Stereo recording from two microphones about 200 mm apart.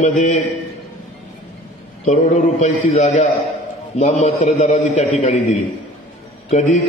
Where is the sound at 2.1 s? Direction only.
40° left (ahead or behind).